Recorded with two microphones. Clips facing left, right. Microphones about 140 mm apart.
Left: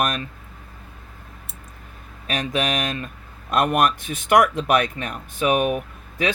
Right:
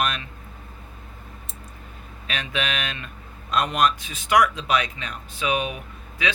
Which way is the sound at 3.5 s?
55° left (ahead or behind).